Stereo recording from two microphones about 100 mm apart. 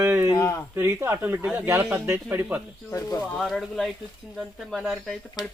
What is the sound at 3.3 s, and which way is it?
Speech, centre (ahead or behind).